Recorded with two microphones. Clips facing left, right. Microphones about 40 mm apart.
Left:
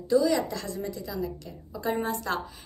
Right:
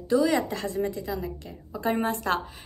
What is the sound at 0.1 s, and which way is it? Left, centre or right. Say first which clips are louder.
A woman's voice: even; right.